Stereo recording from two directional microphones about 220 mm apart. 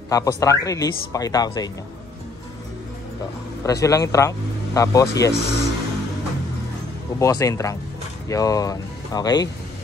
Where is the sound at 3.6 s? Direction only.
15° left (ahead or behind).